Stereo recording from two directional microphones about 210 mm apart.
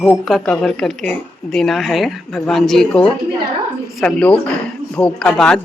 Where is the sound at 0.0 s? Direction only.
Centre (ahead or behind).